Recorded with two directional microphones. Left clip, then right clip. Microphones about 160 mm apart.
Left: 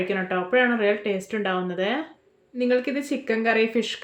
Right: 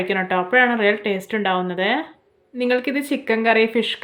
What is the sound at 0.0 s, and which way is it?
Speech, 20° right (ahead or behind).